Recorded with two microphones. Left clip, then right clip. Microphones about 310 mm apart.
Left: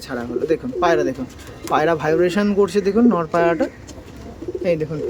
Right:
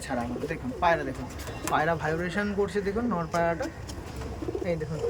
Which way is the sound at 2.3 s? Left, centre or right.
Left.